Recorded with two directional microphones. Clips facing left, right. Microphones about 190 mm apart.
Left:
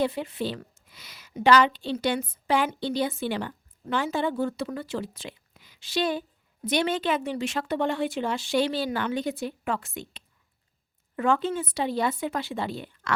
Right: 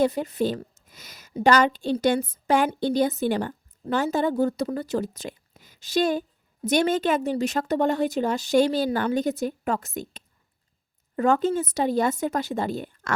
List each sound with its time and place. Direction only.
0.0 s a woman's voice: 40° right (ahead or behind)
0.6 s a sound: 40° right (ahead or behind)
1.5 s a woman's voice: 45° right (ahead or behind)